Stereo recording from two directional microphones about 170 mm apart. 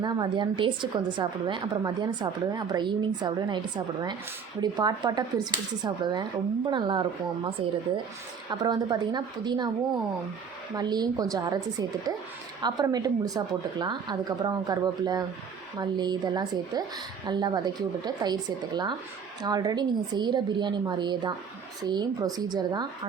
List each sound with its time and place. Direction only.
0.0 s a woman's voice: 25° right (ahead or behind)
4.6 s a woman's voice: 25° right (ahead or behind)
10.8 s a woman's voice: 25° right (ahead or behind)